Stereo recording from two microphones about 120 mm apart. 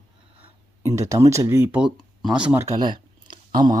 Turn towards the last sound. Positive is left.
turn(degrees=-35)  # may be behind; listen again after turning